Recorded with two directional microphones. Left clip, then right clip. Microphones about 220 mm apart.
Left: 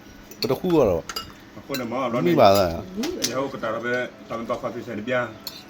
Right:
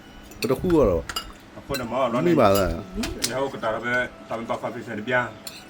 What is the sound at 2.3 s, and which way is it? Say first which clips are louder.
Speech: left 4 dB; 10° right (ahead or behind).